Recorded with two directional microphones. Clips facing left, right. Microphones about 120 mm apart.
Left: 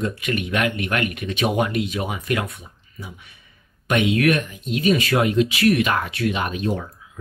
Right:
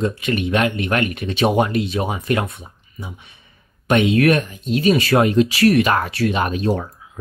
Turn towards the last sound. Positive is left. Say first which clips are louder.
# right 4 dB
turn(degrees=-40)  # may be behind; listen again after turning